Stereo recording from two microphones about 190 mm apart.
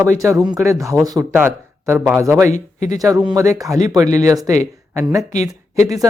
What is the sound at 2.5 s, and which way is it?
Speech, 40° left (ahead or behind).